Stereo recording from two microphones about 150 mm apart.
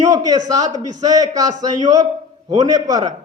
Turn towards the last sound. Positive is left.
turn(degrees=-25)  # may be behind; listen again after turning